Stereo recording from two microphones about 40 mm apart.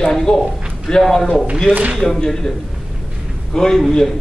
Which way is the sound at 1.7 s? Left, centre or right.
Right.